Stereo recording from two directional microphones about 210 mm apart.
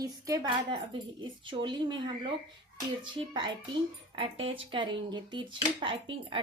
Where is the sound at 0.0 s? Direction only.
15° right (ahead or behind).